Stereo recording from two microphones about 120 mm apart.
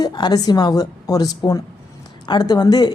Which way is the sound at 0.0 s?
35° left (ahead or behind).